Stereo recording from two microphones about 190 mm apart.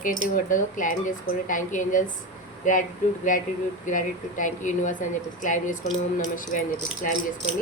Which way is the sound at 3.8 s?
45° left (ahead or behind).